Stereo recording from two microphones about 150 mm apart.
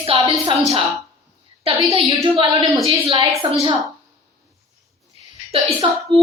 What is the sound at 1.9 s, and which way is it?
A woman's voice, 25° right (ahead or behind).